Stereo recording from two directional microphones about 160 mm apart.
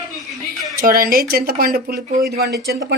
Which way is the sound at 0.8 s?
65° right (ahead or behind).